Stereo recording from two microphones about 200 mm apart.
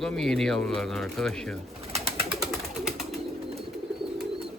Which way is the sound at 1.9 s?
30° right (ahead or behind).